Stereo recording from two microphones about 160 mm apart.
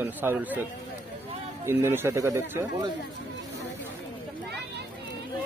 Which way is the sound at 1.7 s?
15° right (ahead or behind).